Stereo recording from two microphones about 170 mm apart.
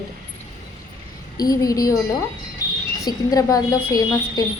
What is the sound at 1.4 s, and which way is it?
Speech, 20° left (ahead or behind).